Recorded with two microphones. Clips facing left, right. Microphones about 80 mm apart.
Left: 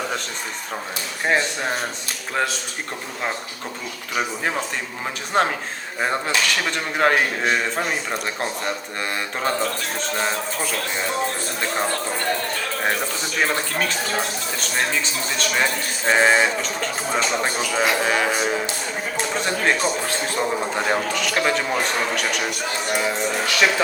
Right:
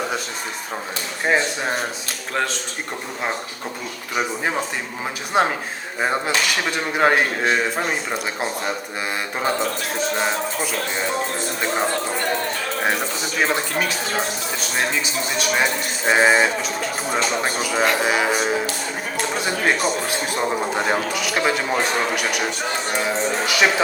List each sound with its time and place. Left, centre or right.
1.2 s speech: centre
4.1 s speech: centre
10.2 s speech: centre
13.2 s speech: centre